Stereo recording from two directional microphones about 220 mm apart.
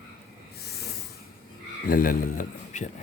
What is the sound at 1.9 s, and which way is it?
A man's voice, 40° left (ahead or behind).